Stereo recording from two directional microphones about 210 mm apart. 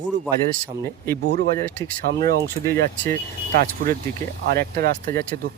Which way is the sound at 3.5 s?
45° right (ahead or behind).